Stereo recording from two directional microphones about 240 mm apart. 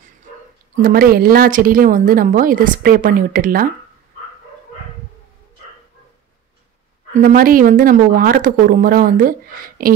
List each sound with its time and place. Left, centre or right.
0.8 s speech: right
7.2 s speech: right